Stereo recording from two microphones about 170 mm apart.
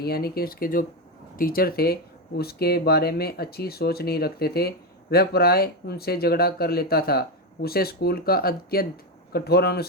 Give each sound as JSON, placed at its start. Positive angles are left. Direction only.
{"t": 0.0, "sound": "speech", "side_deg": 65}